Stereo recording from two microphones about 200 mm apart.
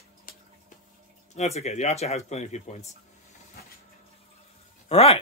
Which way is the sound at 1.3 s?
35° left (ahead or behind).